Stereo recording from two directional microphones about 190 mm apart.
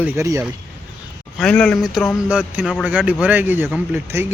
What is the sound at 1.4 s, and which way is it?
Speech, 5° left (ahead or behind).